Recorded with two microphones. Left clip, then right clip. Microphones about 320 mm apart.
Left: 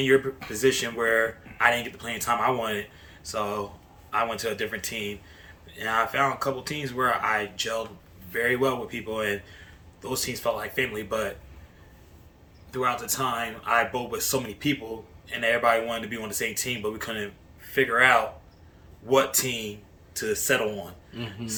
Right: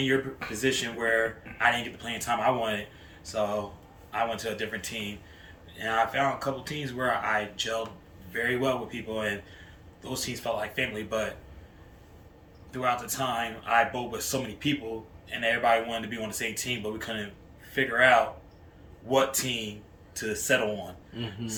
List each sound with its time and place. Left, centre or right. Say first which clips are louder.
0.5 s speech: left 4 dB; centre
12.7 s speech: left 2 dB; centre